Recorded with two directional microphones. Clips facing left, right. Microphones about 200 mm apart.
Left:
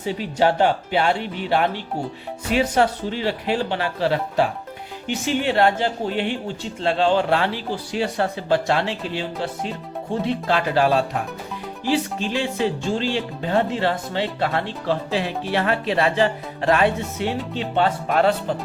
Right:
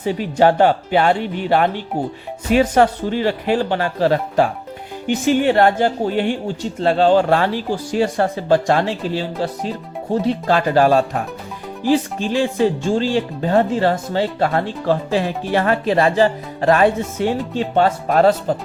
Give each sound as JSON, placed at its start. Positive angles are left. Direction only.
{"t": 0.0, "sound": "speech", "side_deg": -50}